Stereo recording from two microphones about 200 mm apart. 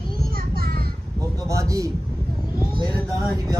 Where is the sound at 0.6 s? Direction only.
50° right (ahead or behind).